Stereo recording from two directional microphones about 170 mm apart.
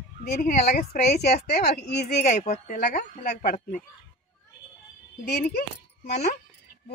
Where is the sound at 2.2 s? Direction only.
45° left (ahead or behind).